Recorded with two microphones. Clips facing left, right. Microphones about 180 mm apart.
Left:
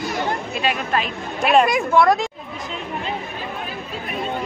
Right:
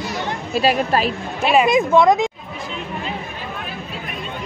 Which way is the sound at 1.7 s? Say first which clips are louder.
Right 3 dB; 20° right (ahead or behind).